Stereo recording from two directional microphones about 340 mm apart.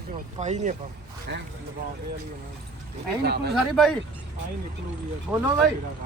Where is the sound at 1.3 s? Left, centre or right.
Right.